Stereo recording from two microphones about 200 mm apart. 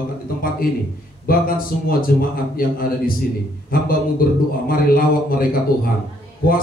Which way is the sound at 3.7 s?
45° left (ahead or behind).